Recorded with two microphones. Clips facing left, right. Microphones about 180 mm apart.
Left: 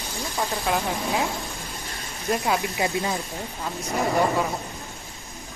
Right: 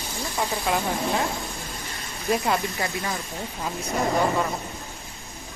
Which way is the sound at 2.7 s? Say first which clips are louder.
Left 4 dB; 15° left (ahead or behind).